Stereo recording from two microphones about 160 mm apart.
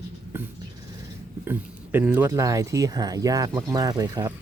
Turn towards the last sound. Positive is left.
turn(degrees=-25)  # may be behind; listen again after turning